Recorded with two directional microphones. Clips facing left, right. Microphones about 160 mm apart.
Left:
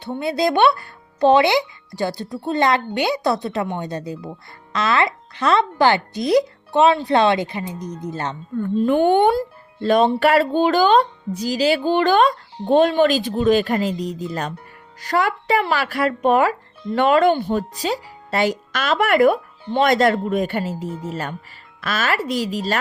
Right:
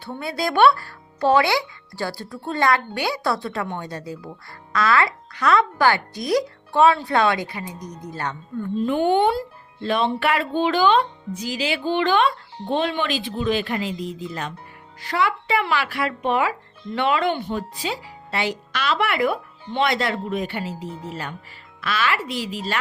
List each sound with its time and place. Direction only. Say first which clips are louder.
0.0 s speech: left 6 dB; 20° left (ahead or behind)
8.8 s speech: left 3 dB; 50° left (ahead or behind)
9.8 s speech: left 6 dB; 40° left (ahead or behind)